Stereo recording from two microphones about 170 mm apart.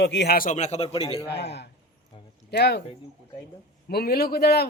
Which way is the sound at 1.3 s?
85° left.